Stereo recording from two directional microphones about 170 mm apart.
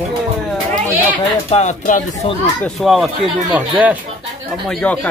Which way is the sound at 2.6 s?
Centre (ahead or behind).